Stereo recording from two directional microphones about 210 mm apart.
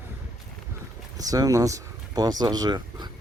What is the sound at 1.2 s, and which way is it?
Speech, 15° right (ahead or behind).